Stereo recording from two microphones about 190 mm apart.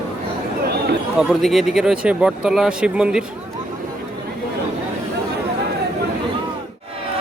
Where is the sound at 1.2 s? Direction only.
Centre (ahead or behind).